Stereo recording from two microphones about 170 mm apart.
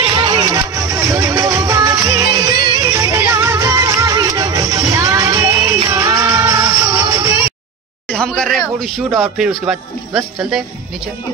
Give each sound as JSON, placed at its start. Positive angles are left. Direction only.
{"t": 0.1, "sound": "music", "side_deg": -25}
{"t": 8.1, "sound": "speech", "side_deg": 5}